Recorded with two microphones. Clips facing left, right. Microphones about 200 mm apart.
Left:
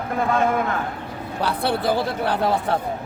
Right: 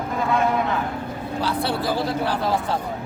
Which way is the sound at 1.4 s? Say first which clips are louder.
Left 2 dB; 55° left (ahead or behind).